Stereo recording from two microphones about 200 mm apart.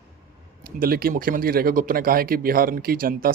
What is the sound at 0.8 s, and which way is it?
Speech, 50° right (ahead or behind).